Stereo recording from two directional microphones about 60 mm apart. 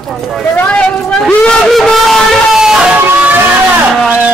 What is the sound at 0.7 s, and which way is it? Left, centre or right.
Speech, centre.